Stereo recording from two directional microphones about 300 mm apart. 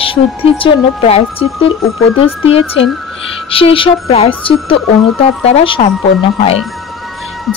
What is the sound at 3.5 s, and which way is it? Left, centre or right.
A woman's voice, centre.